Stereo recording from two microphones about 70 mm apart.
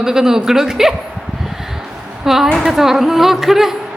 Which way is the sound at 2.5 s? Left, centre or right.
Centre.